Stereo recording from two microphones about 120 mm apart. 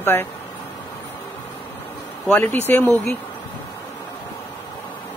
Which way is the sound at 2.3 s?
15° left (ahead or behind).